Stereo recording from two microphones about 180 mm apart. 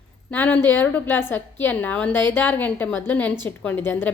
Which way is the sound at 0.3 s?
10° left (ahead or behind).